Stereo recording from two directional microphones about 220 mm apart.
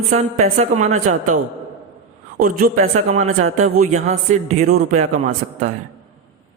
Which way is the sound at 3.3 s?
75° right (ahead or behind).